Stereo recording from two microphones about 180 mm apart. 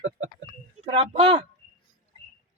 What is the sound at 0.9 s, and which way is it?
Speech, 30° right (ahead or behind).